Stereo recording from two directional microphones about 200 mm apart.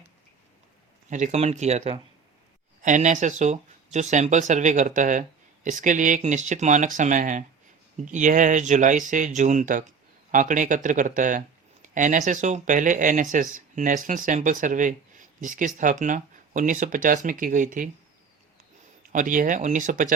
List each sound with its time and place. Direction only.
1.1 s speech: 35° right (ahead or behind)
19.1 s speech: 40° right (ahead or behind)